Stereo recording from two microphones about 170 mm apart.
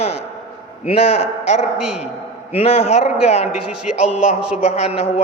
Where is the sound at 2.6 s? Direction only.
35° left (ahead or behind).